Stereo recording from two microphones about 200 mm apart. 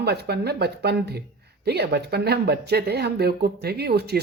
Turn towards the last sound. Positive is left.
turn(degrees=-55)  # may be behind; listen again after turning